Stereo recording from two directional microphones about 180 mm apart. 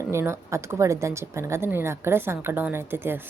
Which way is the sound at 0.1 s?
15° right (ahead or behind).